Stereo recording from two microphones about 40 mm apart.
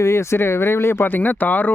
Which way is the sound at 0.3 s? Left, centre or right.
Left.